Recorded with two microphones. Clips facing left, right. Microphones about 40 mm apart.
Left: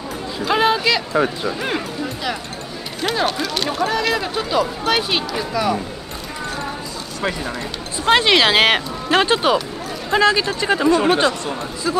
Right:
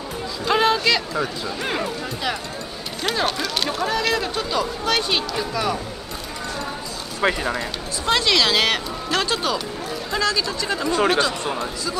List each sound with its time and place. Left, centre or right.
0.5 s speech: centre
1.1 s speech: left
1.6 s speech: centre
7.2 s speech: centre
8.0 s speech: left